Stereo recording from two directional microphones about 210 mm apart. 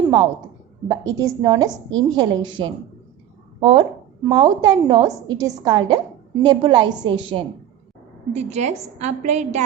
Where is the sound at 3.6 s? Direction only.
30° right (ahead or behind).